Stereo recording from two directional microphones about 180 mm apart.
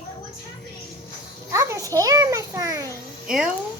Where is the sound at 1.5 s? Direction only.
15° right (ahead or behind).